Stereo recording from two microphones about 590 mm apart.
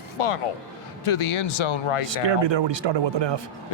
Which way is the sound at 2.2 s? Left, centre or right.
Right.